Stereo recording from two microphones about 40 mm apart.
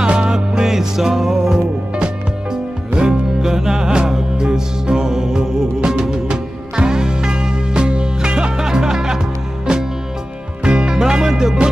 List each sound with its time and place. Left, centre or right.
0.2 s music: centre
3.0 s music: centre